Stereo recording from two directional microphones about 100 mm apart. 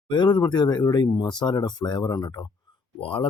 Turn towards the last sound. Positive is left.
turn(degrees=60)  # may be behind; listen again after turning